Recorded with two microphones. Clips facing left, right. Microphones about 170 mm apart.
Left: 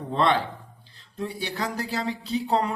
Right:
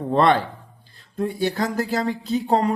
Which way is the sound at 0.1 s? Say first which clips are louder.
Right 5 dB; 55° right (ahead or behind).